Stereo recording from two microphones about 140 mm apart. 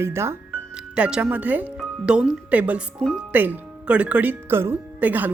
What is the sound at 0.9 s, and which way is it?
Speech, 10° right (ahead or behind).